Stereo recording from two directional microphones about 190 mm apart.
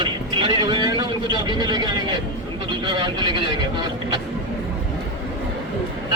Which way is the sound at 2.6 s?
25° right (ahead or behind).